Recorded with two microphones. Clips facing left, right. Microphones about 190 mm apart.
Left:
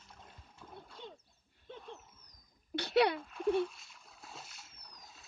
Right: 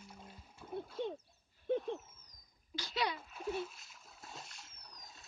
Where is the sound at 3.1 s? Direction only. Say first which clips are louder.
Left 8 dB; 5° right (ahead or behind).